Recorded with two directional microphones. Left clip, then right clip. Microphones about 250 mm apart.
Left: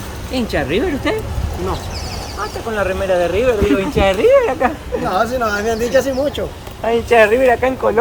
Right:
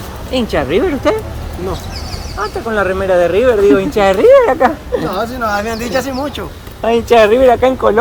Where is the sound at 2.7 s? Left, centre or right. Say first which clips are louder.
Right 4 dB; right.